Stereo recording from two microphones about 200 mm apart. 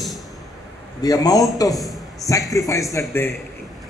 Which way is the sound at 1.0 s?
15° left (ahead or behind).